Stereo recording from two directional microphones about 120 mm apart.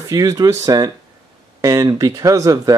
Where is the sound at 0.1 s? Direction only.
30° right (ahead or behind).